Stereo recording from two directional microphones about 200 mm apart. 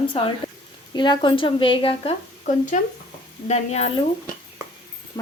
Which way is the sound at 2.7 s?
40° left (ahead or behind).